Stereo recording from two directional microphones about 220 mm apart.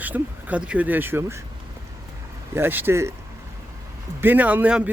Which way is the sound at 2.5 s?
10° right (ahead or behind).